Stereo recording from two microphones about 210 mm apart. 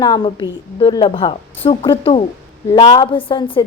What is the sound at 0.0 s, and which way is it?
A woman's voice, 20° left (ahead or behind).